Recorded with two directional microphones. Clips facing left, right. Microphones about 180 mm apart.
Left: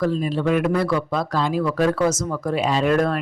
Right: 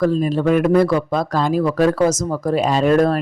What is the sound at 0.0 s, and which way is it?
Speech, 45° right (ahead or behind).